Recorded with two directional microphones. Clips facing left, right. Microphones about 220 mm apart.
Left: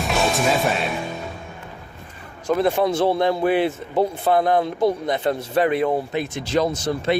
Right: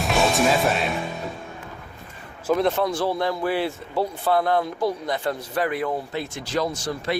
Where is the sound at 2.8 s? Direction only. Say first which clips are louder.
Left 5 dB; 25° left (ahead or behind).